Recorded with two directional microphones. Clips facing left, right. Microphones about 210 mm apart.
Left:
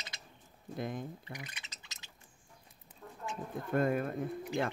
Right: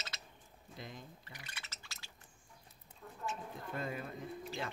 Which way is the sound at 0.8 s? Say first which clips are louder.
Left 11 dB; 55° left (ahead or behind).